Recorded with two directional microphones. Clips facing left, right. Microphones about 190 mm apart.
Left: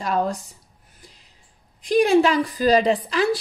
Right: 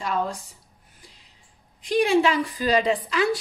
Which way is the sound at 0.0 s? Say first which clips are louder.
Left 4 dB; 40° left (ahead or behind).